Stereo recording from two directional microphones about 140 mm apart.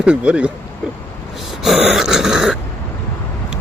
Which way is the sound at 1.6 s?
Centre (ahead or behind).